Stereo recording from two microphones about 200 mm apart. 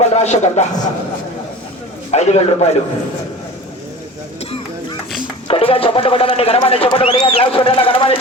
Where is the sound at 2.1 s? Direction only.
35° left (ahead or behind).